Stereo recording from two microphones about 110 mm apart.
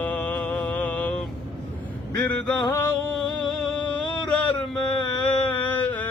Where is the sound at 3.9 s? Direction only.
45° left (ahead or behind).